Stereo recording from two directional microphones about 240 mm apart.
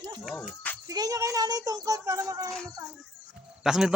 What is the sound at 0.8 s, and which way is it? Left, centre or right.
Speech, centre.